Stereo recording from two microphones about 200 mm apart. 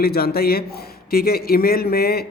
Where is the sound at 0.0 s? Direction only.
50° left (ahead or behind).